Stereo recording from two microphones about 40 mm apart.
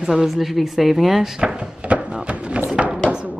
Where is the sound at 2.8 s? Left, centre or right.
Centre.